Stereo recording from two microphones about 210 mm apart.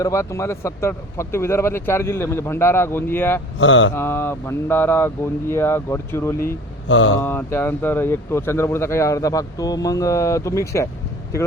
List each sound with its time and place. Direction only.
0.0 s speech: 15° left (ahead or behind)
3.6 s mantra: 60° left (ahead or behind)
3.9 s speech: 10° left (ahead or behind)
6.4 s speech: 60° left (ahead or behind)
7.2 s speech: 10° left (ahead or behind)